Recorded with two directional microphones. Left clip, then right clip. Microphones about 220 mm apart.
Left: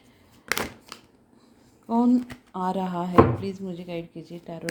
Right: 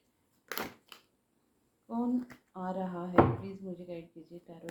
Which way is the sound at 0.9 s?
25° left (ahead or behind).